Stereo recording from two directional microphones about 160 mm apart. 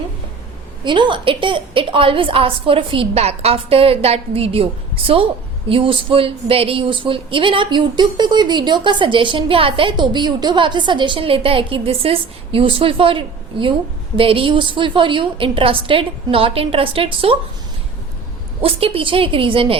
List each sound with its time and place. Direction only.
0.9 s speech: 30° right (ahead or behind)
18.6 s speech: 35° right (ahead or behind)